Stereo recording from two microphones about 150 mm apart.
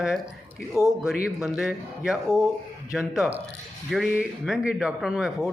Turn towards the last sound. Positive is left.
turn(degrees=-5)  # may be behind; listen again after turning